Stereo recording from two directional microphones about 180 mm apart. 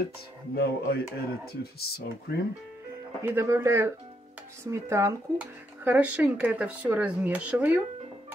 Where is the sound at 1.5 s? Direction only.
60° left (ahead or behind).